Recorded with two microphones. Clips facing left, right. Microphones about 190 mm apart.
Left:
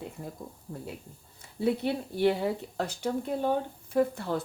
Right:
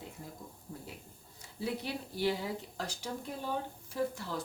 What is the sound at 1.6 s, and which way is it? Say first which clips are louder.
Speech: left 9 dB; 60° left (ahead or behind).